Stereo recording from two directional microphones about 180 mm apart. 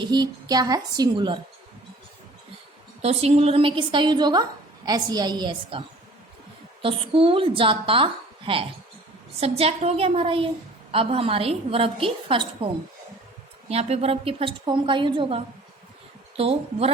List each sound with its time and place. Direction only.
0.0 s a woman's voice: 25° right (ahead or behind)
3.0 s a woman's voice: 35° right (ahead or behind)
6.8 s a woman's voice: 30° right (ahead or behind)
13.7 s a woman's voice: 35° right (ahead or behind)
16.4 s a woman's voice: 35° right (ahead or behind)